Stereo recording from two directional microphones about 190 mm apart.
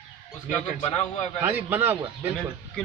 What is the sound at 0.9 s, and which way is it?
Speech, 35° left (ahead or behind).